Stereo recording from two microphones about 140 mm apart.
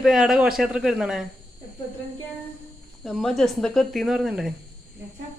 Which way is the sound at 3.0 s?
Centre (ahead or behind).